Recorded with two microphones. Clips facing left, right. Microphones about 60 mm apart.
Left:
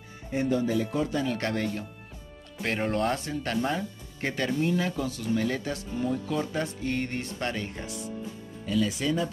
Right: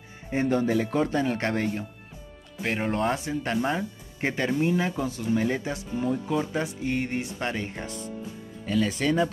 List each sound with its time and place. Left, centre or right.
0.3 s speech: right
2.6 s speech: centre
8.6 s speech: right